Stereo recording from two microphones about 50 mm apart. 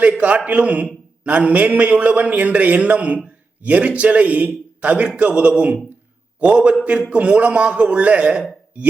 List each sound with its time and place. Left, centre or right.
0.1 s a man's voice: right